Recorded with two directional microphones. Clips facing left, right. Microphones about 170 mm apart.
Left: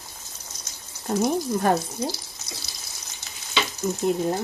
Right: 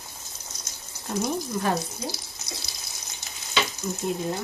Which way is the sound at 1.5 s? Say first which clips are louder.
Left 3 dB; 50° left (ahead or behind).